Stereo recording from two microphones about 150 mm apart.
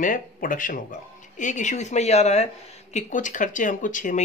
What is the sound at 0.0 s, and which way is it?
Speech, 65° left (ahead or behind).